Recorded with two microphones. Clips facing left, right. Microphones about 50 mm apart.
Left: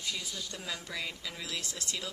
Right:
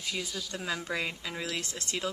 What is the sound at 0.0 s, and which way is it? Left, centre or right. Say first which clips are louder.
Speech: right 3 dB; centre.